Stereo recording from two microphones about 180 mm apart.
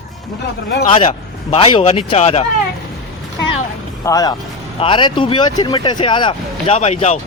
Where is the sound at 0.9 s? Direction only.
30° left (ahead or behind).